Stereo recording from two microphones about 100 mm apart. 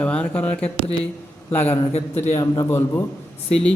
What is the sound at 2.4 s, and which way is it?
Speech, 35° left (ahead or behind).